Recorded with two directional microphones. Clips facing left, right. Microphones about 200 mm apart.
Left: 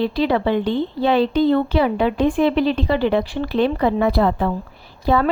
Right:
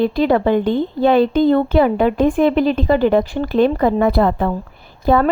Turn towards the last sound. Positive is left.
turn(degrees=-50)  # may be behind; listen again after turning